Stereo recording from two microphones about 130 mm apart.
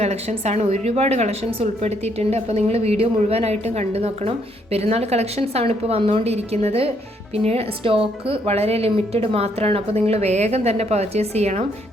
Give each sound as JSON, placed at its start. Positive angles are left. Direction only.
{"t": 0.0, "sound": "a woman's voice", "side_deg": -55}